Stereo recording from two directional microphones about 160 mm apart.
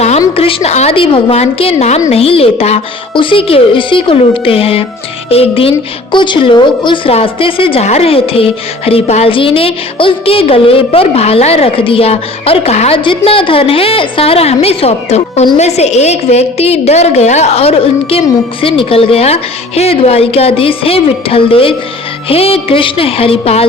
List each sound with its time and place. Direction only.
0.3 s a woman's voice: 35° left (ahead or behind)